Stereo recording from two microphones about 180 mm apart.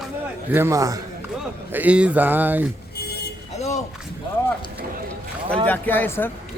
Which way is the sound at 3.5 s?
40° left (ahead or behind).